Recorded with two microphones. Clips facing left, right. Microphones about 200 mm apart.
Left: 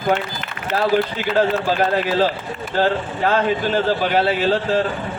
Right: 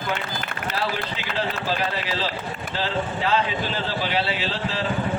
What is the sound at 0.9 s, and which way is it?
Speech, 50° left (ahead or behind).